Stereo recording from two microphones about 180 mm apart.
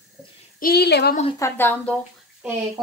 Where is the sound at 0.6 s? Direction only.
60° left (ahead or behind).